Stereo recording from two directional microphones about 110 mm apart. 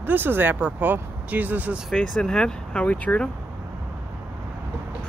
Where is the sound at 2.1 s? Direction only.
5° left (ahead or behind).